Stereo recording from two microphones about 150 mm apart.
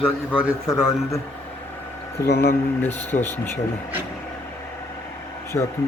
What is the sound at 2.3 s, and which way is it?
Speech, 90° left.